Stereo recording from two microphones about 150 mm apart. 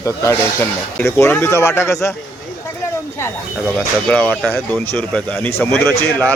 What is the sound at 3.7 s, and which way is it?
Speech, 10° left (ahead or behind).